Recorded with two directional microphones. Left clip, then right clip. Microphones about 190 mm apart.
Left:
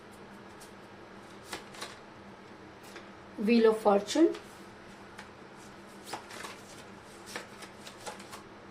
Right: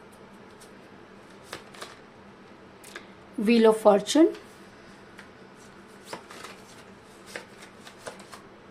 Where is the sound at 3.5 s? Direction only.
50° right (ahead or behind).